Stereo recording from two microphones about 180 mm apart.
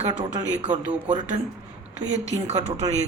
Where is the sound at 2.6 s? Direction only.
40° right (ahead or behind).